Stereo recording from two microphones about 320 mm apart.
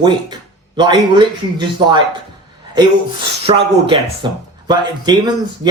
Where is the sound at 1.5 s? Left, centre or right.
Centre.